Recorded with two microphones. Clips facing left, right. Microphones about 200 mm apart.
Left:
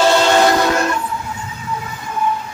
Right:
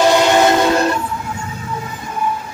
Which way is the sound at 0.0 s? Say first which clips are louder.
Right 1 dB; 15° right (ahead or behind).